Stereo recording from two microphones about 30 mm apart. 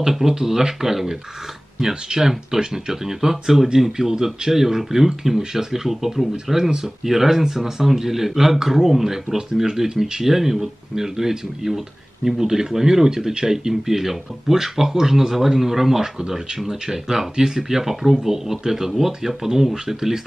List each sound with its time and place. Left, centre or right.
0.3 s speech: centre
2.0 s speech: centre
13.8 s speech: centre